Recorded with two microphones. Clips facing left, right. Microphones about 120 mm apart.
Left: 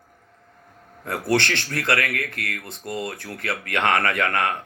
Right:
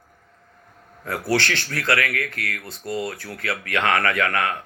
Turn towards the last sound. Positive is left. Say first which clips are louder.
# even
turn(degrees=25)  # may be behind; listen again after turning